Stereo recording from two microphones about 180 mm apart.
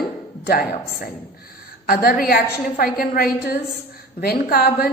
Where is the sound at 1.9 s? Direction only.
55° left (ahead or behind).